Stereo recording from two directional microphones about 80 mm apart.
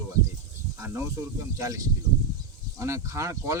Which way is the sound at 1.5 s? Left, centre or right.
Right.